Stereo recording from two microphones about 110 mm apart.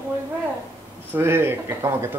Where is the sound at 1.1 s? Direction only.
20° right (ahead or behind).